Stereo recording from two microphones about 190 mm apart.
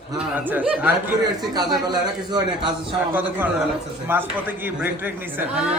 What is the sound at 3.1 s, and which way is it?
A man's voice, 10° right (ahead or behind).